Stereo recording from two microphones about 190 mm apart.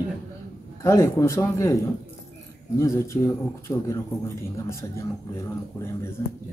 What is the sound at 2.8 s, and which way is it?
A man's voice, 15° left (ahead or behind).